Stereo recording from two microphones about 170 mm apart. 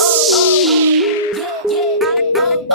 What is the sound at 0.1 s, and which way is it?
Music, centre (ahead or behind).